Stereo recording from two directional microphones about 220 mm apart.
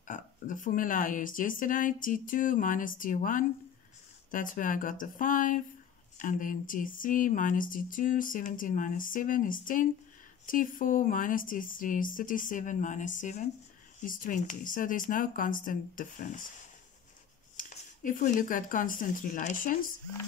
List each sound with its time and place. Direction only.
0.1 s speech: 35° left (ahead or behind)
17.6 s speech: 35° left (ahead or behind)